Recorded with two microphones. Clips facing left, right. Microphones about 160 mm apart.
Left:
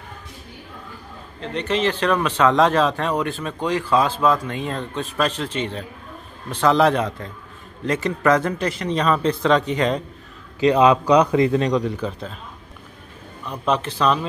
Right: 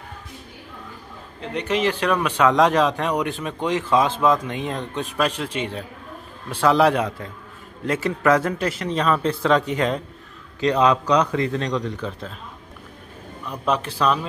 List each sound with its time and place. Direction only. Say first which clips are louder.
1.4 s speech: even; 10° right (ahead or behind)
10.6 s a man's voice: left 3 dB; 5° left (ahead or behind)
13.5 s speech: left 1 dB; 5° right (ahead or behind)